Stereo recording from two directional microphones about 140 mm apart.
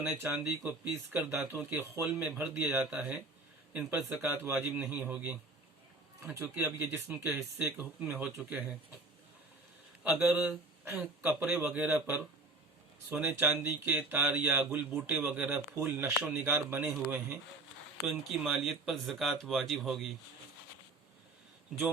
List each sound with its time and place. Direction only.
0.2 s speech: 10° right (ahead or behind)
7.3 s speech: centre (ahead or behind)
10.0 s speech: 5° right (ahead or behind)
18.0 s speech: centre (ahead or behind)